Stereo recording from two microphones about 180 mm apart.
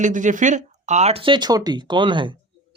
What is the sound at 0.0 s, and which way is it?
Speech, 45° right (ahead or behind).